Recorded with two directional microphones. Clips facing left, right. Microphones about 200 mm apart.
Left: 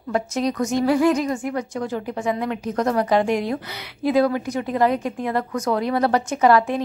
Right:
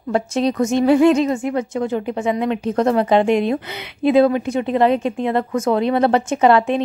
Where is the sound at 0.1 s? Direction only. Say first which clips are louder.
Right 4 dB; 30° right (ahead or behind).